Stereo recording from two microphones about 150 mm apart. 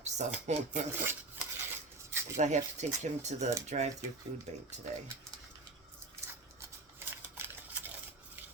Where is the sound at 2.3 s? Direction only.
50° right (ahead or behind).